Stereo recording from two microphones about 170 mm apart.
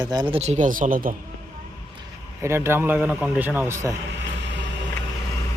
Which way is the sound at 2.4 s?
15° right (ahead or behind).